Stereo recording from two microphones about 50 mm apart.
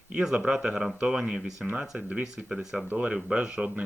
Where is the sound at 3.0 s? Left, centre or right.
Right.